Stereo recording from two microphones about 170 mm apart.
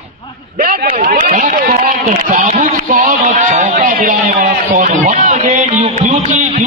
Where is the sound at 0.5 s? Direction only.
60° right (ahead or behind).